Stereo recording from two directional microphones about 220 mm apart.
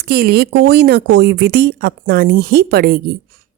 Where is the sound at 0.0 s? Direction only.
45° right (ahead or behind).